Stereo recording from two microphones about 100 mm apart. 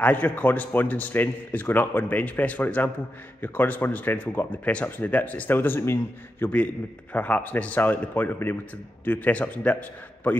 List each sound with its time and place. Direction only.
0.0 s a man's voice: 15° left (ahead or behind)